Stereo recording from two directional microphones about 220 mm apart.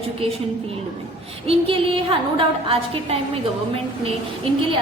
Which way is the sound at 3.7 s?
25° right (ahead or behind).